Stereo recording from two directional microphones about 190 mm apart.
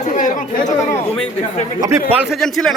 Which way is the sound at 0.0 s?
40° left (ahead or behind).